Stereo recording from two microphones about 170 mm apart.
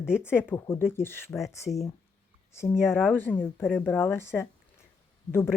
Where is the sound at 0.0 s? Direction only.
5° right (ahead or behind).